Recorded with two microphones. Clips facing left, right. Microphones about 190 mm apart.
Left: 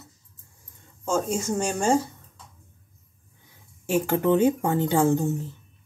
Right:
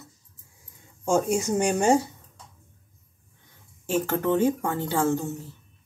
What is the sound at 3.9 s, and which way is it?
Speech, 10° left (ahead or behind).